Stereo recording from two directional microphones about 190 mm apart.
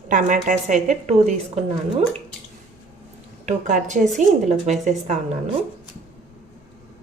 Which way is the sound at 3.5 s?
40° right (ahead or behind).